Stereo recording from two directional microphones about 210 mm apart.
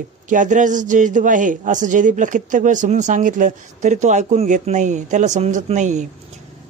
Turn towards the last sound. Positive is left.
turn(degrees=-35)  # may be behind; listen again after turning